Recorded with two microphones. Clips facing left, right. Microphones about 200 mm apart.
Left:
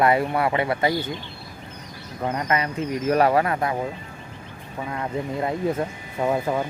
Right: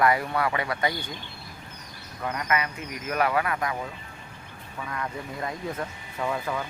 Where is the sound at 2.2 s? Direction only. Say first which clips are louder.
Left 4 dB; 30° left (ahead or behind).